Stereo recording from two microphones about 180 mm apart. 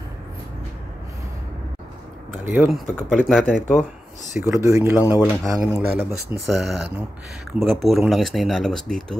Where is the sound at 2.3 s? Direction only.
10° right (ahead or behind).